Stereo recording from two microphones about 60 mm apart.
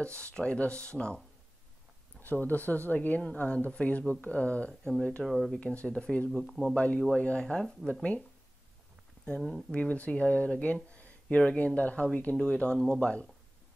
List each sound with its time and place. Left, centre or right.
0.0 s speech: centre
2.2 s speech: left
5.2 s speech: centre
5.5 s speech: centre
6.4 s speech: centre
6.7 s speech: left
9.7 s speech: left